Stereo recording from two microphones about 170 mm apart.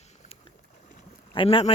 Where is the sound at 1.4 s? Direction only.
35° left (ahead or behind).